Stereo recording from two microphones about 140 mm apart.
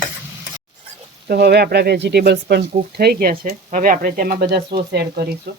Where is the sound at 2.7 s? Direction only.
90° right.